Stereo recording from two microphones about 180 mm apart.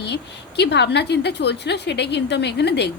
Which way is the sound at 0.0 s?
70° left (ahead or behind).